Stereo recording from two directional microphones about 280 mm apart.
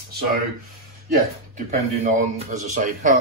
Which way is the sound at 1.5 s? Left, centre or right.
Right.